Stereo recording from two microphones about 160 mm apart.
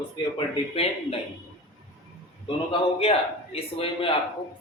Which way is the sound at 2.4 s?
35° left (ahead or behind).